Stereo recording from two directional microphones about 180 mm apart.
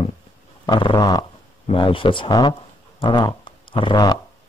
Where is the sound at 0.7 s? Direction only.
25° left (ahead or behind).